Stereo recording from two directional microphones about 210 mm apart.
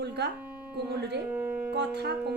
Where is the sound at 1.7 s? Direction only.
50° right (ahead or behind).